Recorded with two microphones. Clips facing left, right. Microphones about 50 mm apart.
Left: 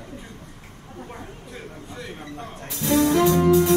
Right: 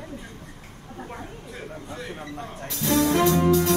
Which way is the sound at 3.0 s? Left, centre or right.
Centre.